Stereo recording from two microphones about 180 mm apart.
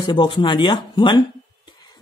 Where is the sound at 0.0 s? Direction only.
25° left (ahead or behind).